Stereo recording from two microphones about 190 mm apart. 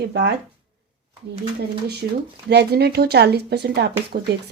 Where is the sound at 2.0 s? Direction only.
55° right (ahead or behind).